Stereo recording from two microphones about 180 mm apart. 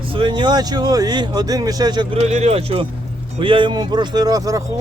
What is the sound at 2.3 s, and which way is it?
Speech, 40° right (ahead or behind).